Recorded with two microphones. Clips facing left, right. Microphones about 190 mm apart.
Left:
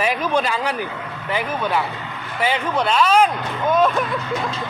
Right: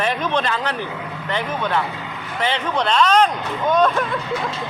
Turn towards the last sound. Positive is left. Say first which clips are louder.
# even
turn(degrees=5)  # may be behind; listen again after turning